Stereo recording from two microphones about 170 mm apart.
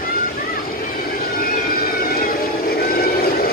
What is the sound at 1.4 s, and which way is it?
Vehicle, 60° left (ahead or behind).